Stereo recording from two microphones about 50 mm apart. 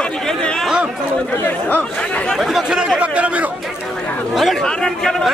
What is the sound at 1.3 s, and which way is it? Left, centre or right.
Speech, left.